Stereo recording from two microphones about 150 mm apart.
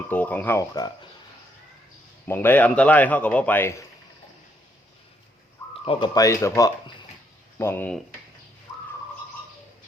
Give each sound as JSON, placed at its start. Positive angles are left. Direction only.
{"t": 0.1, "sound": "a man's voice", "side_deg": 10}
{"t": 2.2, "sound": "a man's voice", "side_deg": 15}
{"t": 5.7, "sound": "bird", "side_deg": 40}
{"t": 6.1, "sound": "a man's voice", "side_deg": 20}